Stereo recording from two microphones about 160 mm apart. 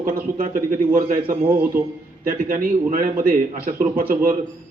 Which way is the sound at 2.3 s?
60° right (ahead or behind).